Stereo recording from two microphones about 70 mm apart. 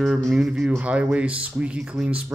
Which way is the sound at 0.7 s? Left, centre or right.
Centre.